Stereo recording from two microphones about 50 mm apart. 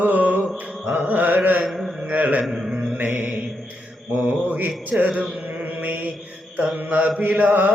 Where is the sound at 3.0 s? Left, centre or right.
Right.